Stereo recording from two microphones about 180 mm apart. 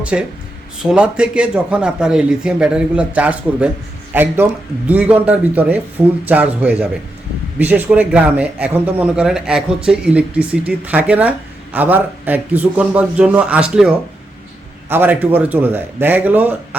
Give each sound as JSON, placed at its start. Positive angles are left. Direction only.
{"t": 0.0, "sound": "speech", "side_deg": -5}